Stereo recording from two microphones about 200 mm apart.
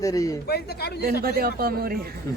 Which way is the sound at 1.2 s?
50° right (ahead or behind).